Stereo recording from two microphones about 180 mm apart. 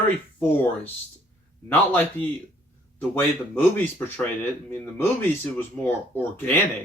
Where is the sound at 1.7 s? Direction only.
10° left (ahead or behind).